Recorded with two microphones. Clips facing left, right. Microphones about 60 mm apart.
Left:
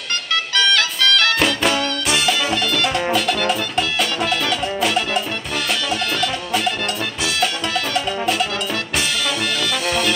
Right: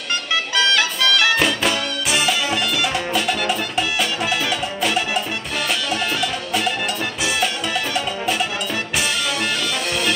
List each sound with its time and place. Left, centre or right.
0.6 s music: centre
7.9 s music: centre
9.8 s music: centre